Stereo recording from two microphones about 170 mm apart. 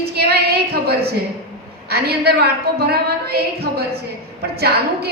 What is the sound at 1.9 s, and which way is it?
A woman's voice, 70° right (ahead or behind).